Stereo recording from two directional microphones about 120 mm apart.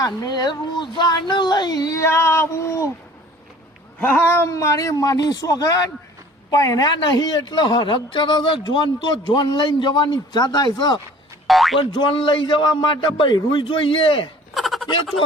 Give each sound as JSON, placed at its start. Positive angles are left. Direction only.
{"t": 0.0, "sound": "a man's voice", "side_deg": 30}
{"t": 4.0, "sound": "a man's voice", "side_deg": 15}
{"t": 11.4, "sound": "speech", "side_deg": 0}
{"t": 11.8, "sound": "a man's voice", "side_deg": 45}
{"t": 14.5, "sound": "a sound", "side_deg": 0}